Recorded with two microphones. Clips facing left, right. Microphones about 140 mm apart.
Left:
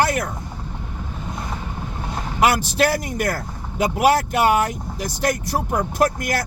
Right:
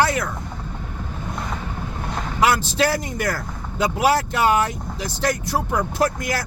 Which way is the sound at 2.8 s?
55° left (ahead or behind).